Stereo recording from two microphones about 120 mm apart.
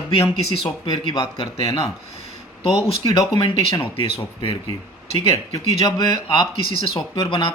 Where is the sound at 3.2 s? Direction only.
40° left (ahead or behind).